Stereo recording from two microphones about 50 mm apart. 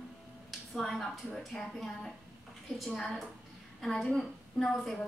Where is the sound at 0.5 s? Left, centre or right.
Centre.